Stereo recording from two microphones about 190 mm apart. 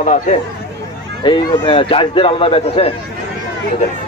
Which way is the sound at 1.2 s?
25° left (ahead or behind).